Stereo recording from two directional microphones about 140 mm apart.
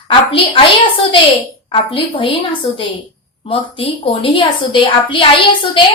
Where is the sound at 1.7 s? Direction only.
40° left (ahead or behind).